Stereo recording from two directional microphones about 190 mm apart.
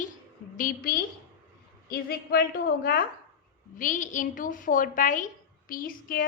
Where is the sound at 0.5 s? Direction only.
45° left (ahead or behind).